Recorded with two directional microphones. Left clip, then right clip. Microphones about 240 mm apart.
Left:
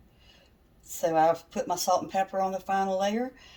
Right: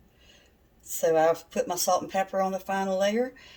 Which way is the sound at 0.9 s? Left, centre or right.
Centre.